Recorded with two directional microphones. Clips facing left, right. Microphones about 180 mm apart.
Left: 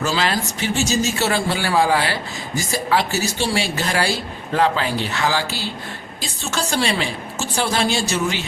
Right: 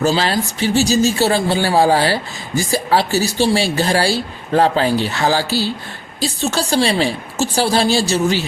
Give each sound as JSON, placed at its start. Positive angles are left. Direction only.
{"t": 0.0, "sound": "speech", "side_deg": -35}